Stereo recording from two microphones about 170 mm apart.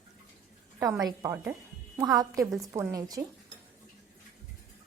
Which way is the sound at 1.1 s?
20° right (ahead or behind).